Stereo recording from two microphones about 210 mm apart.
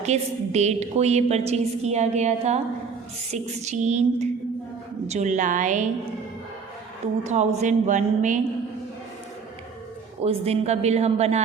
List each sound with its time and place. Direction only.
0.0 s a woman's voice: 30° right (ahead or behind)
7.3 s a woman's voice: 30° right (ahead or behind)
10.2 s a woman's voice: 30° right (ahead or behind)